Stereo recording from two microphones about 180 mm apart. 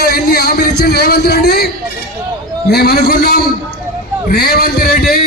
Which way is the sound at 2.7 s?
60° left (ahead or behind).